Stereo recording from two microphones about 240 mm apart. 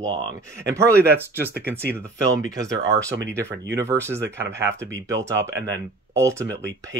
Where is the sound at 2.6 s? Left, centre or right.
Centre.